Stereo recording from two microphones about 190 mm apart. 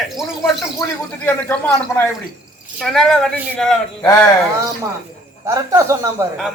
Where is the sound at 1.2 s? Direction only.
10° left (ahead or behind).